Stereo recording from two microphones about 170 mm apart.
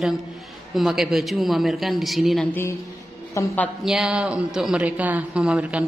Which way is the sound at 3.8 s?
5° right (ahead or behind).